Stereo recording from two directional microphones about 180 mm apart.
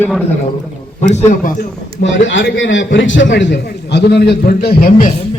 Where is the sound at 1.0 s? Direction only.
45° left (ahead or behind).